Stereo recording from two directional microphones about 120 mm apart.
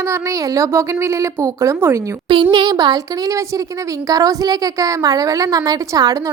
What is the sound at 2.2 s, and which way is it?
A woman's voice, 40° right (ahead or behind).